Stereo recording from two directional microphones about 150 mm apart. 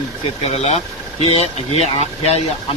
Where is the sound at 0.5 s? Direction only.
45° left (ahead or behind).